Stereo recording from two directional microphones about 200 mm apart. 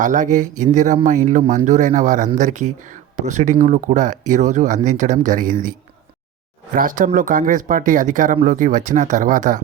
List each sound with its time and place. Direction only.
0.0 s speech: 40° right (ahead or behind)
6.7 s speech: 45° right (ahead or behind)